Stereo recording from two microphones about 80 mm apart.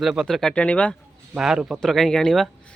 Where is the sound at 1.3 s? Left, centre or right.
Centre.